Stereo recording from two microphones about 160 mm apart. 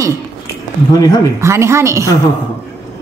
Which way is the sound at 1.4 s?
15° right (ahead or behind).